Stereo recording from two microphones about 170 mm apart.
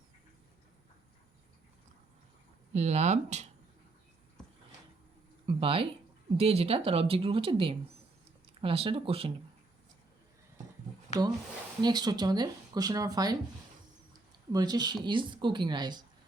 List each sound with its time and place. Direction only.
2.7 s a woman's voice: 40° right (ahead or behind)
5.5 s a woman's voice: 30° right (ahead or behind)
11.8 s speech: 25° right (ahead or behind)
14.5 s speech: 25° right (ahead or behind)